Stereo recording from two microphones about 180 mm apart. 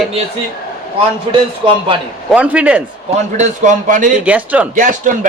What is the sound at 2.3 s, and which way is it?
Speech, 5° right (ahead or behind).